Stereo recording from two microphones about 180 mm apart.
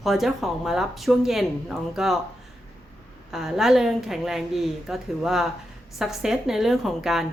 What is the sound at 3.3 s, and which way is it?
A woman's voice, centre (ahead or behind).